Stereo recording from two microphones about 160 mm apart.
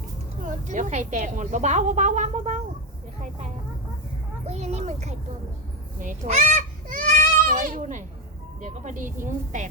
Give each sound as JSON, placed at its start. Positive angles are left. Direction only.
{"t": 0.4, "sound": "a woman's voice", "side_deg": -50}
{"t": 3.2, "sound": "a sound", "side_deg": -45}
{"t": 4.4, "sound": "a woman's voice", "side_deg": -45}